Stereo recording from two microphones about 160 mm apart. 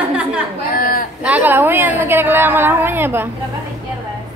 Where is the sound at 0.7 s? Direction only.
60° left (ahead or behind).